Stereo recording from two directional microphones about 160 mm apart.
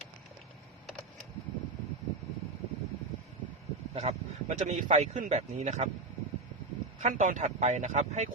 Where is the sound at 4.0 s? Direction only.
45° right (ahead or behind).